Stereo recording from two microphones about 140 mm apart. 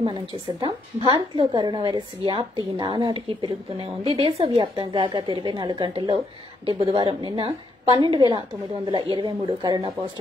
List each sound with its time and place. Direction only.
0.0 s a woman's voice: 35° right (ahead or behind)